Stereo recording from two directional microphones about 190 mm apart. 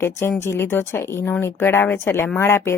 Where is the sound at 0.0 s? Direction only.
10° left (ahead or behind).